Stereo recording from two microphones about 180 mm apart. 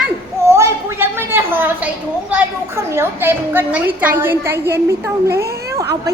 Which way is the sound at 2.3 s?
15° right (ahead or behind).